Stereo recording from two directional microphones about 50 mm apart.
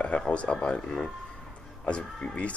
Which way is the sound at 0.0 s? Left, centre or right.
Left.